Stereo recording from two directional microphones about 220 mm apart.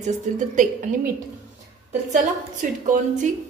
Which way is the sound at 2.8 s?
35° right (ahead or behind).